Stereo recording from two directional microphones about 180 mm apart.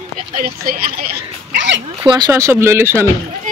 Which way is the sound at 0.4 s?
55° right (ahead or behind).